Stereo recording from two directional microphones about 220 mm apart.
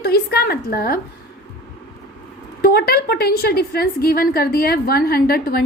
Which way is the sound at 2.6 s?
45° left (ahead or behind).